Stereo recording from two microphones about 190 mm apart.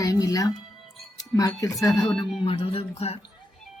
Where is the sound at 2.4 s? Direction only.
30° left (ahead or behind).